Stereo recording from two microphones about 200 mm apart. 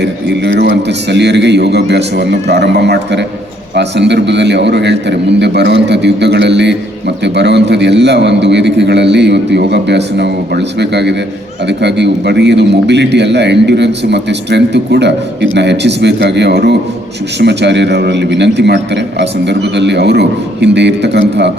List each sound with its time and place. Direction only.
0.0 s a man's voice: 60° right (ahead or behind)